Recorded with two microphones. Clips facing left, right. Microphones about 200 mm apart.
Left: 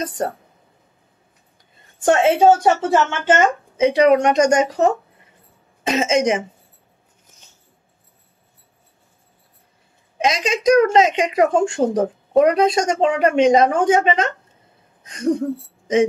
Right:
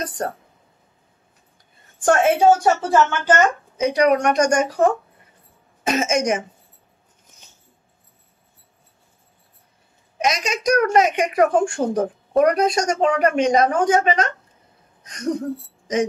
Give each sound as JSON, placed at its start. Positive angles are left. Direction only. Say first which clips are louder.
{"t": 2.0, "sound": "a woman's voice", "louder": "left 2 dB", "side_deg": 25}
{"t": 10.1, "sound": "a woman's voice", "louder": "left 3 dB", "side_deg": 25}